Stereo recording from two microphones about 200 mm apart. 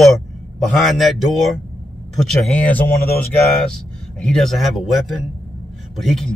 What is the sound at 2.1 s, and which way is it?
Speech, 5° left (ahead or behind).